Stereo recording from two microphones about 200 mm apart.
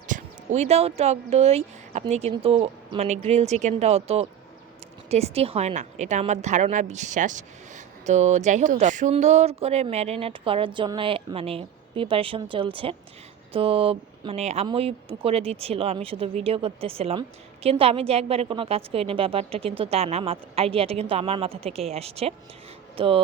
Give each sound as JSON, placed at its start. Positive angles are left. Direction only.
{"t": 0.1, "sound": "speech", "side_deg": -35}